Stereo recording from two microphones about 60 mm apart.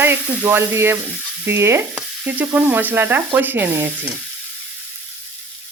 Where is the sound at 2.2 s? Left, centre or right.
Right.